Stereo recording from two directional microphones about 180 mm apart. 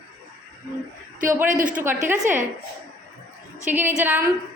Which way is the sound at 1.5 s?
45° right (ahead or behind).